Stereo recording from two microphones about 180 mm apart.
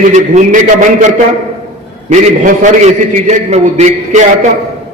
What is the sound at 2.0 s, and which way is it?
A man's voice, 45° right (ahead or behind).